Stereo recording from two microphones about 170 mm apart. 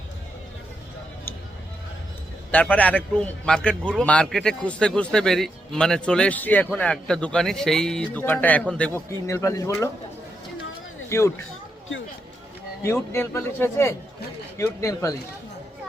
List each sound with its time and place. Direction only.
2.5 s a man's voice: 10° left (ahead or behind)
11.1 s a man's voice: 15° left (ahead or behind)
12.8 s a man's voice: 15° left (ahead or behind)